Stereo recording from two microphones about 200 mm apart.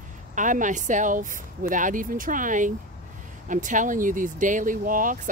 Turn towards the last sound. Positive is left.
turn(degrees=-40)  # may be behind; listen again after turning